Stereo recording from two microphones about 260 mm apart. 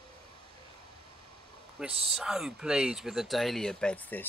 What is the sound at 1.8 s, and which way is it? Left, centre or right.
Speech, centre.